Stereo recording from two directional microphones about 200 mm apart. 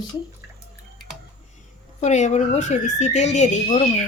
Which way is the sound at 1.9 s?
35° left (ahead or behind).